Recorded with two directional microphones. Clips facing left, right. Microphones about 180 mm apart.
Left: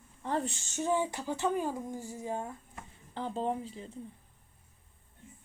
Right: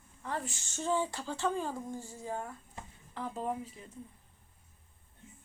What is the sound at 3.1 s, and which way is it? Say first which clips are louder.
Speech: left 3 dB; 30° left (ahead or behind).